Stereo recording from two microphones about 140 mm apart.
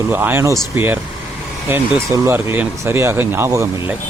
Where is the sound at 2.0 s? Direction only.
20° right (ahead or behind).